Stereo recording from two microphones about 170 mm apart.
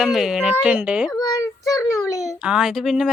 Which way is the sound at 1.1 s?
20° left (ahead or behind).